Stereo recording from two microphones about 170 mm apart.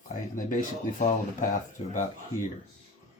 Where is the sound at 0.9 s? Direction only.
50° left (ahead or behind).